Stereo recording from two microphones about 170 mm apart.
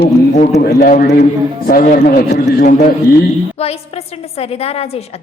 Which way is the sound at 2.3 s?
90° left.